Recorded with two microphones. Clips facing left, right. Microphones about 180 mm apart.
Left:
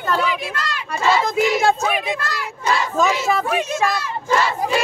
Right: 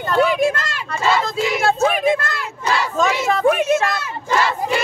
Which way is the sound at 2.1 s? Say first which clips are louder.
Right 6 dB; 50° right (ahead or behind).